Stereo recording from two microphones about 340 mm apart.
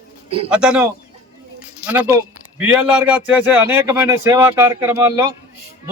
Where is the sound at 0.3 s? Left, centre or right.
Centre.